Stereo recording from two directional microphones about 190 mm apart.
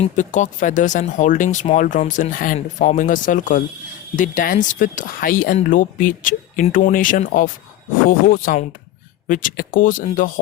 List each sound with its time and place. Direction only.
0.0 s speech: 40° left (ahead or behind)